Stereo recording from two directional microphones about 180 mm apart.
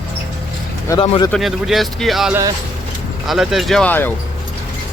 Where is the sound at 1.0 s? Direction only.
30° left (ahead or behind).